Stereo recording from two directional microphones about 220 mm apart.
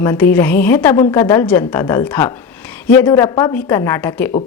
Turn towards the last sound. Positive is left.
turn(degrees=10)  # may be behind; listen again after turning